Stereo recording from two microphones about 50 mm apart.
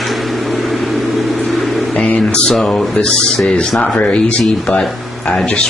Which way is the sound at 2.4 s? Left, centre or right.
Centre.